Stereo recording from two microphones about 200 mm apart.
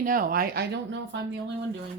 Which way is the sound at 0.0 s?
45° right (ahead or behind).